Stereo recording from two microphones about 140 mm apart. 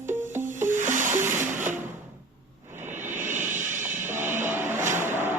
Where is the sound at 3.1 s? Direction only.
65° right (ahead or behind).